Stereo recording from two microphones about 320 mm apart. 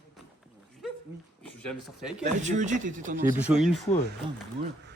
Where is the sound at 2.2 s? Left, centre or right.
Right.